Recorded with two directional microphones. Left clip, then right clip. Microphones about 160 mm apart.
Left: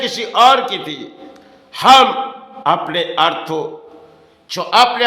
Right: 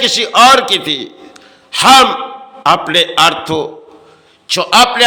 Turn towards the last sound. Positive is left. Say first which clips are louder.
# right 4 dB
turn(degrees=-20)  # may be behind; listen again after turning